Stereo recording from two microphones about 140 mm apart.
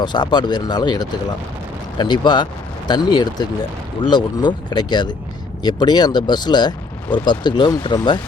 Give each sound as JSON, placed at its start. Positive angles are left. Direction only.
{"t": 0.0, "sound": "speech", "side_deg": 30}